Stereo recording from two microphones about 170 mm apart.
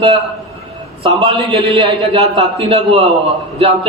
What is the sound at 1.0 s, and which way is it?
A man's voice, 30° right (ahead or behind).